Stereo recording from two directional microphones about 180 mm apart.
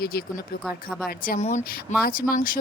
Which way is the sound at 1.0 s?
55° left (ahead or behind).